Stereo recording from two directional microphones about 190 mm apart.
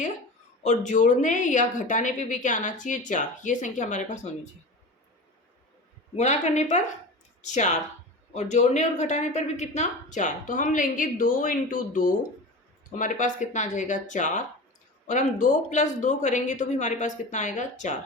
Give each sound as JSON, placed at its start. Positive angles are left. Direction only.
{"t": 0.6, "sound": "a woman's voice", "side_deg": 40}
{"t": 6.1, "sound": "a woman's voice", "side_deg": 40}